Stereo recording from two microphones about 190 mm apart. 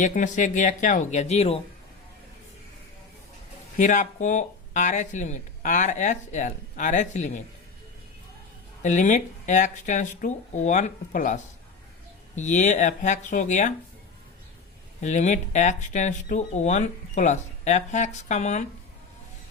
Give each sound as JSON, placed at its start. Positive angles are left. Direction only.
{"t": 0.0, "sound": "speech", "side_deg": 40}
{"t": 3.8, "sound": "speech", "side_deg": 40}
{"t": 8.8, "sound": "speech", "side_deg": 40}
{"t": 12.4, "sound": "speech", "side_deg": 40}
{"t": 15.0, "sound": "speech", "side_deg": 40}